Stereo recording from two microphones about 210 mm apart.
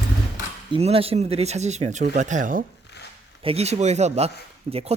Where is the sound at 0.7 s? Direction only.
25° right (ahead or behind).